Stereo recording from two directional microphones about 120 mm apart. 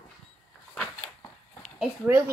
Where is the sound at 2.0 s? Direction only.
20° right (ahead or behind).